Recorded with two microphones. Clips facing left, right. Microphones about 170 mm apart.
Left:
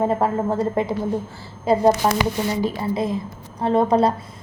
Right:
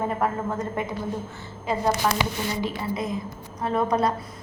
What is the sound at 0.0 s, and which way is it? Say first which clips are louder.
A woman's voice: left 6 dB; 30° left (ahead or behind).